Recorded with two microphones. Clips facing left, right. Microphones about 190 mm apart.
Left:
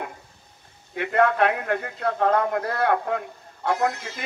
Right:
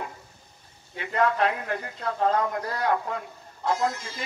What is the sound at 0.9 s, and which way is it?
A man's voice, 60° left (ahead or behind).